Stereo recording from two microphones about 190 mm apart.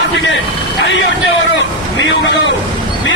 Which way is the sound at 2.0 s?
75° left (ahead or behind).